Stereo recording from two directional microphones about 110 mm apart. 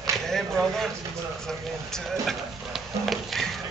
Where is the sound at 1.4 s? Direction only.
5° left (ahead or behind).